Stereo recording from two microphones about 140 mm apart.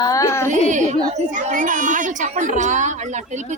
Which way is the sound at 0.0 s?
25° left (ahead or behind).